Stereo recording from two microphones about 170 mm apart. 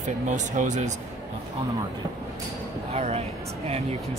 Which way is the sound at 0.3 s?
45° right (ahead or behind).